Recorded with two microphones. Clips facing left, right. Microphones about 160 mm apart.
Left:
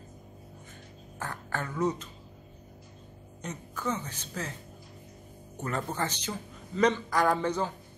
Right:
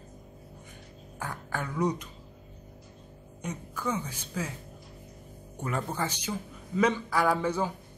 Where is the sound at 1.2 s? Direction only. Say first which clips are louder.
Even; 10° right (ahead or behind).